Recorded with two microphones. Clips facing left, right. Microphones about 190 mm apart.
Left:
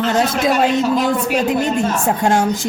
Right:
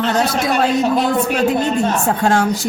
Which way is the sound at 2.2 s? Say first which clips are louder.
Left 1 dB; 15° left (ahead or behind).